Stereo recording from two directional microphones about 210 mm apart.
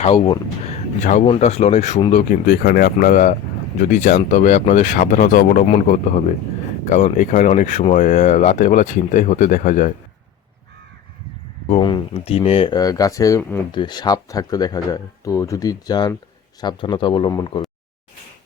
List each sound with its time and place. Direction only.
0.0 s speech: 30° left (ahead or behind)
5.6 s speech: 30° left (ahead or behind)
11.7 s speech: 20° left (ahead or behind)